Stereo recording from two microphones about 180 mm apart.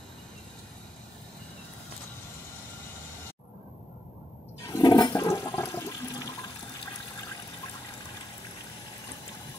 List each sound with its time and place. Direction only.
4.6 s toilet flush: 25° left (ahead or behind)